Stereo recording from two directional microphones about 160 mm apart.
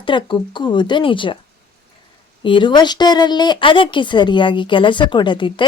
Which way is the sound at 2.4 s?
30° left (ahead or behind).